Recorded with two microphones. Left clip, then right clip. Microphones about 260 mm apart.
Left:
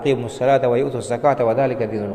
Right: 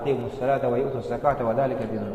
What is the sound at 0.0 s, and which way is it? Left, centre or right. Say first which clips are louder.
A man's voice: left 6 dB; left.